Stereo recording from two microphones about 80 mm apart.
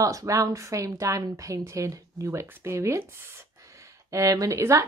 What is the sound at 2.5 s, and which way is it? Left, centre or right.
Speech, right.